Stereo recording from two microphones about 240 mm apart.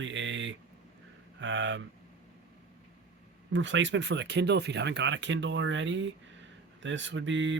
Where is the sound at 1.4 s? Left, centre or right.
Right.